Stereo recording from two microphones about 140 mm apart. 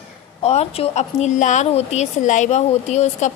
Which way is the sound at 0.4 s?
45° left (ahead or behind).